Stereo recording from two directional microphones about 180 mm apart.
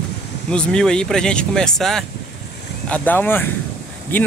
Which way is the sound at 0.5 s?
5° left (ahead or behind).